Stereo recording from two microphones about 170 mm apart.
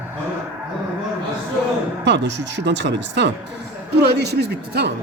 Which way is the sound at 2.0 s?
90° right.